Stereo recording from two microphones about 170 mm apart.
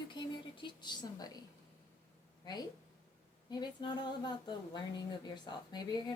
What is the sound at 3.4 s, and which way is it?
A woman's voice, 25° left (ahead or behind).